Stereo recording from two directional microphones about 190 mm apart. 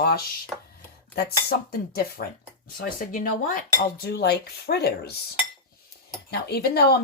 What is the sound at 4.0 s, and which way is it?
Speech, 60° left (ahead or behind).